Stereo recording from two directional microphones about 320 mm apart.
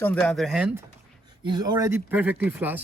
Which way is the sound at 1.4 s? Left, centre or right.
Centre.